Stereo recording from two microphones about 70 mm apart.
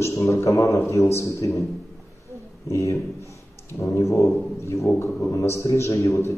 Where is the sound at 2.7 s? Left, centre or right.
Left.